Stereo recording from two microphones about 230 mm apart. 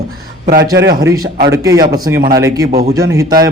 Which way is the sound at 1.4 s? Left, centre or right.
Centre.